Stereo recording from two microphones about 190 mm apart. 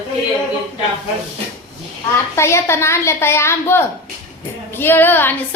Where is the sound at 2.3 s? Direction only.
15° left (ahead or behind).